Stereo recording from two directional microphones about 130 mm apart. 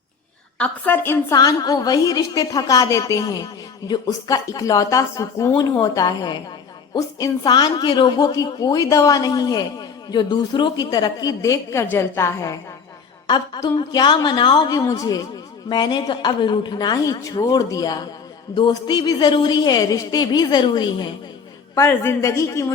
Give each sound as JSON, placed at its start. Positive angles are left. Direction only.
{"t": 0.6, "sound": "a woman's voice", "side_deg": 15}
{"t": 1.4, "sound": "a woman's voice", "side_deg": 30}
{"t": 13.2, "sound": "a woman's voice", "side_deg": 35}
{"t": 21.8, "sound": "a woman's voice", "side_deg": 20}